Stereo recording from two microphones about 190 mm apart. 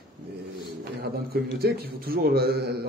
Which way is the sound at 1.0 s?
55° right (ahead or behind).